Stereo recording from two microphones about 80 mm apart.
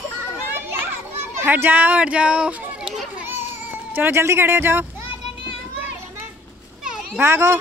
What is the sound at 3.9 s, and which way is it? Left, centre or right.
Speech, right.